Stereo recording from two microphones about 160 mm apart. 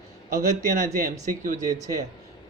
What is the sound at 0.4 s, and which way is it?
A man's voice, 55° right (ahead or behind).